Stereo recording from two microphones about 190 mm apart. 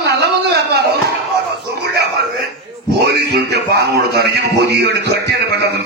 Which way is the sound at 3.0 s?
60° right (ahead or behind).